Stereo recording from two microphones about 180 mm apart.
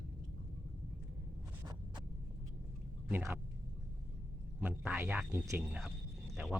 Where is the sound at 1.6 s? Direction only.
20° right (ahead or behind).